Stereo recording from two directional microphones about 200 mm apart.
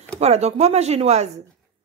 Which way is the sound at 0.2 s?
30° right (ahead or behind).